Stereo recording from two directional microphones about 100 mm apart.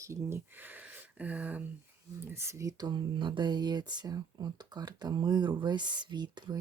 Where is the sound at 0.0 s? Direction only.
30° right (ahead or behind).